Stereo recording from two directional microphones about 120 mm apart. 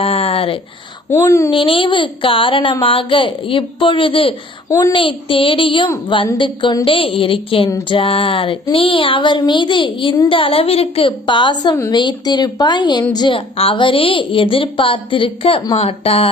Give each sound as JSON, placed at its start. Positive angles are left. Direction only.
{"t": 0.0, "sound": "a sound", "side_deg": 55}
{"t": 1.1, "sound": "a child's voice", "side_deg": 25}
{"t": 1.5, "sound": "a woman's voice", "side_deg": 45}